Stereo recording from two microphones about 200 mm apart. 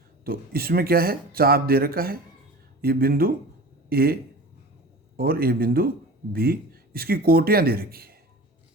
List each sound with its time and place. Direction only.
0.3 s speech: 50° right (ahead or behind)